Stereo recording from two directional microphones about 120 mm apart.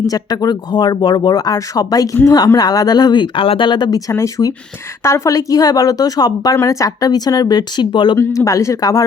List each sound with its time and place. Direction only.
0.1 s speech: 35° left (ahead or behind)
8.2 s speech: 25° left (ahead or behind)